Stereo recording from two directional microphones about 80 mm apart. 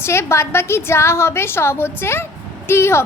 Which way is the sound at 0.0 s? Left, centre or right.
Left.